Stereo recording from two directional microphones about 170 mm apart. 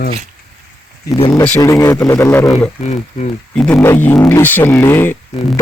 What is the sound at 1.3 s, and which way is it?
Speech, 5° left (ahead or behind).